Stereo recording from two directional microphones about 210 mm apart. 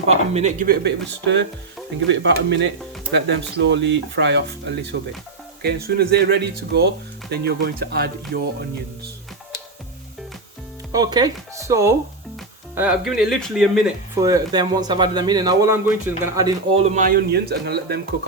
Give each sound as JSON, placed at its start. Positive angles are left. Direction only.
{"t": 0.1, "sound": "speech", "side_deg": -30}
{"t": 0.7, "sound": "speech", "side_deg": -55}
{"t": 10.9, "sound": "speech", "side_deg": -20}
{"t": 14.2, "sound": "speech", "side_deg": -15}
{"t": 16.7, "sound": "speech", "side_deg": -35}